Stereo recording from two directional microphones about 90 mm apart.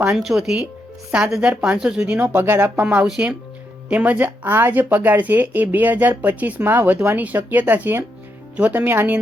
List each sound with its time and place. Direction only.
0.0 s speech: 5° right (ahead or behind); by 9.1 s 20° right (ahead or behind)